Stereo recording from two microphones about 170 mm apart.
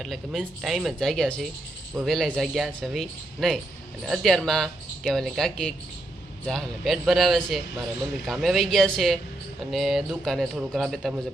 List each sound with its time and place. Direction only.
0.0 s a man's voice: centre (ahead or behind)